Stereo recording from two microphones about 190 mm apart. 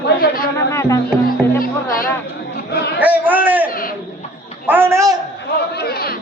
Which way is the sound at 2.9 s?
10° right (ahead or behind).